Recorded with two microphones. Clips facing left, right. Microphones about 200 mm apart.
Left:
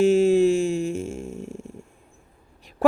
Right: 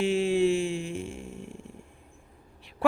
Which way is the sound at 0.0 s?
45° left (ahead or behind).